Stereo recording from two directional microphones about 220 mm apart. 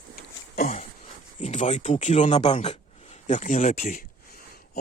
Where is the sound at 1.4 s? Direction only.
25° left (ahead or behind).